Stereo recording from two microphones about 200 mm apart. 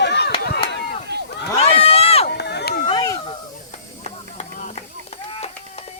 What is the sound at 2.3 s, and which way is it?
Run, 60° left (ahead or behind).